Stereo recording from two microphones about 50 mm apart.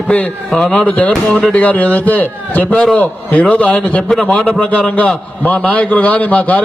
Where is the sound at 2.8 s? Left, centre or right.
Centre.